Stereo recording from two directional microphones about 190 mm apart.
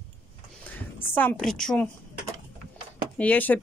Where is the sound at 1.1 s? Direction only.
10° left (ahead or behind).